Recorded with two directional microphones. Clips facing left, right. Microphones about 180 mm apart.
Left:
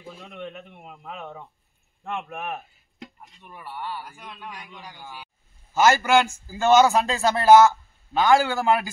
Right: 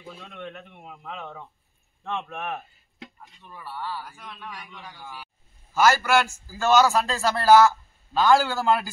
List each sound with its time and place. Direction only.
0.0 s speech: 10° left (ahead or behind)
4.6 s a man's voice: 5° left (ahead or behind)
5.8 s a man's voice: 20° left (ahead or behind)